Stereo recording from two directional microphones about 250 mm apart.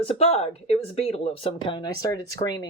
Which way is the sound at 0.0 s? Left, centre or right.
Left.